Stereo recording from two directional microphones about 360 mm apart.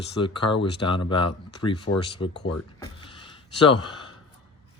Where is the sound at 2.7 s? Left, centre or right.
Centre.